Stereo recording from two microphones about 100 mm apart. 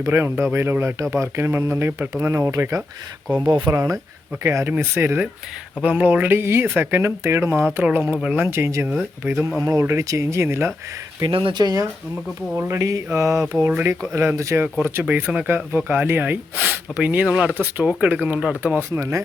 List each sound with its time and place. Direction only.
0.1 s speech: 20° right (ahead or behind)
3.4 s speech: 45° right (ahead or behind)
3.8 s speech: 35° right (ahead or behind)
8.2 s speech: 10° right (ahead or behind)
8.4 s speech: 25° right (ahead or behind)
9.6 s speech: 35° right (ahead or behind)
11.3 s speech: 60° right (ahead or behind)
11.6 s speech: 35° right (ahead or behind)
12.5 s speech: 25° right (ahead or behind)
13.7 s speech: 20° right (ahead or behind)
15.0 s speech: 10° right (ahead or behind)
18.8 s speech: 30° right (ahead or behind)